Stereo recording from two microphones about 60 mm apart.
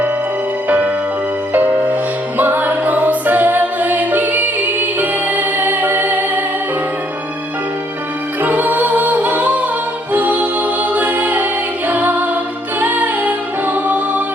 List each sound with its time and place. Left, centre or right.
1.5 s music: right
8.4 s music: right